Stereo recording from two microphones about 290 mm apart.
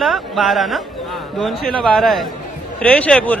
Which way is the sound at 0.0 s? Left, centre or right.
Centre.